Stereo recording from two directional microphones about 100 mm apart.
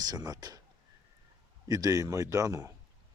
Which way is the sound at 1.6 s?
35° right (ahead or behind).